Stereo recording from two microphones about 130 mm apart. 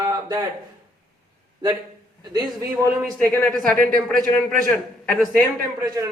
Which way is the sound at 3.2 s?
10° left (ahead or behind).